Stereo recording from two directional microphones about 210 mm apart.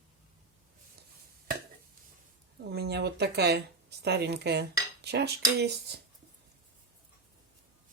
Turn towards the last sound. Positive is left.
turn(degrees=-50)  # may be behind; listen again after turning